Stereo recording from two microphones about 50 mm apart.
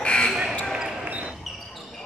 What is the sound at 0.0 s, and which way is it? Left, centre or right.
Basketball bounce, left.